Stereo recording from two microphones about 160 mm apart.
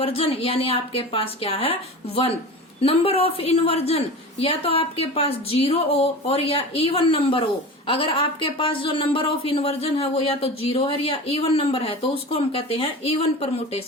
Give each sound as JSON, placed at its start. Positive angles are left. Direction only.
{"t": 0.0, "sound": "a woman's voice", "side_deg": 35}
{"t": 2.8, "sound": "a woman's voice", "side_deg": 35}